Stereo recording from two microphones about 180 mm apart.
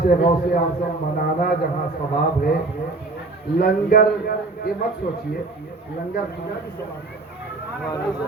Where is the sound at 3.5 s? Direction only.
55° left (ahead or behind).